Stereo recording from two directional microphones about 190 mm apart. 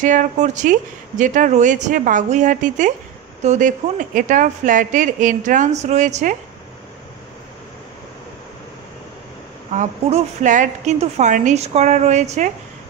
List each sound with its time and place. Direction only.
0.0 s speech: 40° right (ahead or behind)
9.7 s speech: 35° right (ahead or behind)